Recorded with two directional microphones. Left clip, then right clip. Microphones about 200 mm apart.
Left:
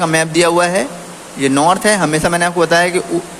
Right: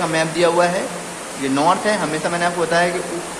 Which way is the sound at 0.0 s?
50° left (ahead or behind).